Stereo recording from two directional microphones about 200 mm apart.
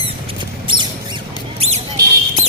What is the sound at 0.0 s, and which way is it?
Mouse, 25° right (ahead or behind).